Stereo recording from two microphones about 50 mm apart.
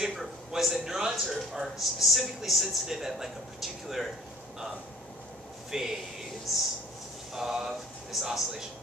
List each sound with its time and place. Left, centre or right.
0.0 s speech: centre
5.7 s speech: centre